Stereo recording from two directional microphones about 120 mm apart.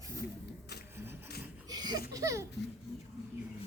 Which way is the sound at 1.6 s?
30° right (ahead or behind).